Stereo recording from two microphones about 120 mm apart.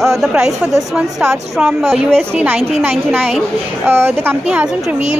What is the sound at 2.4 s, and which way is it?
A woman's voice, 15° right (ahead or behind).